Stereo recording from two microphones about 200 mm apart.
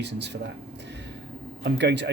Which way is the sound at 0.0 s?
60° right (ahead or behind).